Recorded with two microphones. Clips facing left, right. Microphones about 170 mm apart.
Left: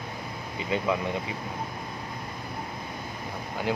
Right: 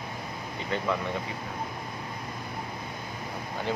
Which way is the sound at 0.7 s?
15° left (ahead or behind).